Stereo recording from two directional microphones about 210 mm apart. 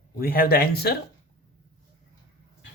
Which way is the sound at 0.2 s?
45° left (ahead or behind).